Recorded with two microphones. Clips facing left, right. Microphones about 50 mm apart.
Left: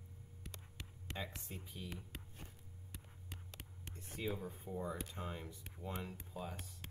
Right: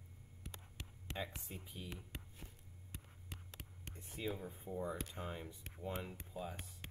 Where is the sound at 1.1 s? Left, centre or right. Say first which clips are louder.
Right 1 dB; centre.